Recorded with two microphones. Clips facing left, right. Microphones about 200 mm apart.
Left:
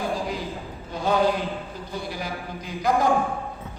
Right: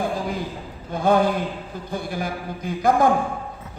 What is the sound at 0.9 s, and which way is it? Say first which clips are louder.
A man's voice: right 3 dB; 55° right (ahead or behind).